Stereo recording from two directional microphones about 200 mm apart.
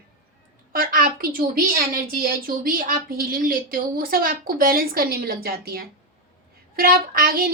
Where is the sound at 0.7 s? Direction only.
45° right (ahead or behind).